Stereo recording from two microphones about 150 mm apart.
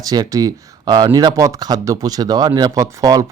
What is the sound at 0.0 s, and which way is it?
Speech, 25° right (ahead or behind).